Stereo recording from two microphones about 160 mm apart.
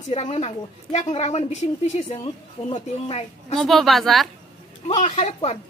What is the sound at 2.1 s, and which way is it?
Speech, 30° left (ahead or behind).